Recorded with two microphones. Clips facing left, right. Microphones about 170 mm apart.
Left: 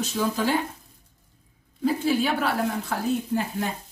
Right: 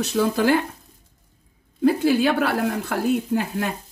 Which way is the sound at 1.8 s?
65° right (ahead or behind).